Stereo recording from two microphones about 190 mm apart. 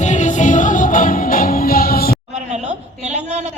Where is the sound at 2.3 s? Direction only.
35° right (ahead or behind).